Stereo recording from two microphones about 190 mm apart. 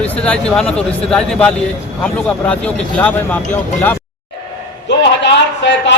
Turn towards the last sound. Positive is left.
turn(degrees=65)  # may be behind; listen again after turning